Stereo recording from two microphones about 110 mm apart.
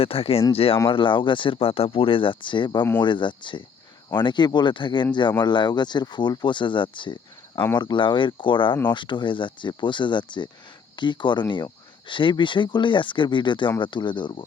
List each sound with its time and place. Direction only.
0.0 s speech: 60° left (ahead or behind)